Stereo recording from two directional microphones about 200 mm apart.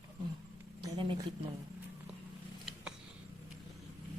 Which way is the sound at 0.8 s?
25° right (ahead or behind).